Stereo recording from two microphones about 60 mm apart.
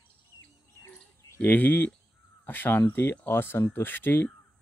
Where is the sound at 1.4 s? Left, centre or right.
Left.